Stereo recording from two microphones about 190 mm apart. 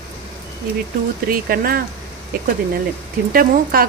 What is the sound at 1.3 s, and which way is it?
Speech, 50° right (ahead or behind).